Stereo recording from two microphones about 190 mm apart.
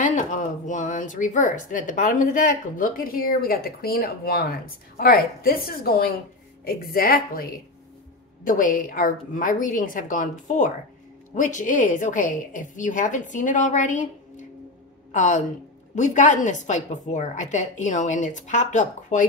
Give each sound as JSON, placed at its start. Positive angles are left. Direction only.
{"t": 0.0, "sound": "speech", "side_deg": 40}
{"t": 8.5, "sound": "a woman's voice", "side_deg": 45}